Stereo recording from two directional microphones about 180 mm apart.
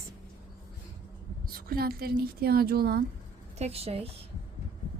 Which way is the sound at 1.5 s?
55° right (ahead or behind).